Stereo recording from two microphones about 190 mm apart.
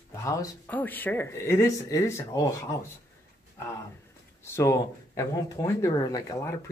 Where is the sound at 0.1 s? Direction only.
15° left (ahead or behind).